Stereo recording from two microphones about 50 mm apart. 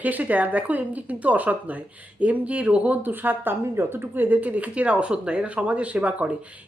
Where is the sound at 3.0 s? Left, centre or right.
Right.